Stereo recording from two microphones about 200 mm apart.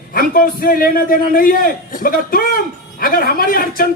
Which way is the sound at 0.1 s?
45° left (ahead or behind).